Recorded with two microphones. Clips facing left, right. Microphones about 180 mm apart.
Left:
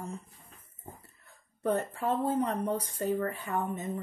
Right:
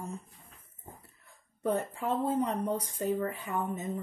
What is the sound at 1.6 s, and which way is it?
Speech, 10° right (ahead or behind).